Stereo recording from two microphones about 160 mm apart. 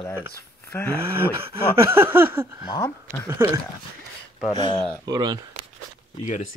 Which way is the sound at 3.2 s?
15° right (ahead or behind).